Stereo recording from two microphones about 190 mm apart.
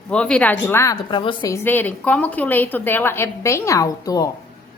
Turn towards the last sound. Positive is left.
turn(degrees=20)  # may be behind; listen again after turning